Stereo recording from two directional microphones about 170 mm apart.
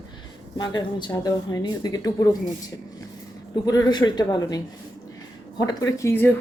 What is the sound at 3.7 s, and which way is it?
A woman's voice, 20° left (ahead or behind).